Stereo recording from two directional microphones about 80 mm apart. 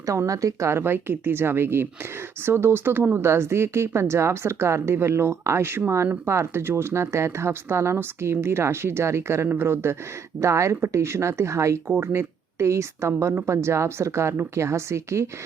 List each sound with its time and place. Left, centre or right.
0.0 s speech: right